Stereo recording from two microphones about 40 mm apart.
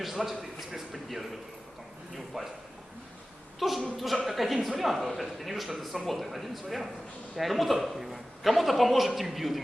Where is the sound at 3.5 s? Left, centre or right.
Centre.